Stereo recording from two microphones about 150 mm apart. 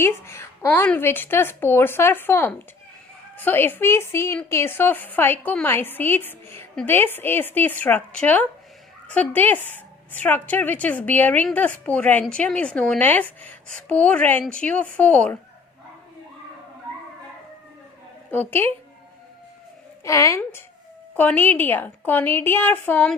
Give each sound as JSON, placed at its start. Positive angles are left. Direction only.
{"t": 0.0, "sound": "speech", "side_deg": 15}
{"t": 18.3, "sound": "a woman's voice", "side_deg": 15}
{"t": 20.1, "sound": "a child's voice", "side_deg": 20}